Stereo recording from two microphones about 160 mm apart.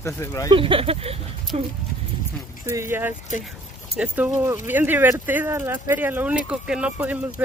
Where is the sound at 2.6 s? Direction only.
15° right (ahead or behind).